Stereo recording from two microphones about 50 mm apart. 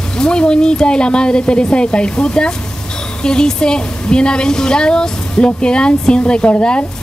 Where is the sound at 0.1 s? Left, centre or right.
Centre.